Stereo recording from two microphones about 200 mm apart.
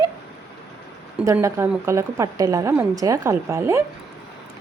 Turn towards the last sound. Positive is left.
turn(degrees=-15)  # may be behind; listen again after turning